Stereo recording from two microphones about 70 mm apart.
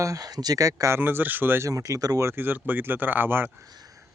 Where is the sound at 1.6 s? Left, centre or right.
Right.